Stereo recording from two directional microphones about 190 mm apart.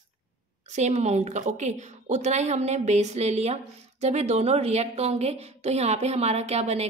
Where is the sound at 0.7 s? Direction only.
40° right (ahead or behind).